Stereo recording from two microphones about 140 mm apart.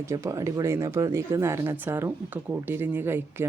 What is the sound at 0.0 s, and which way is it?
Speech, 20° right (ahead or behind).